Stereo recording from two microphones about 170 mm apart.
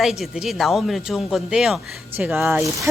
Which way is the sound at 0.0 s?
Centre (ahead or behind).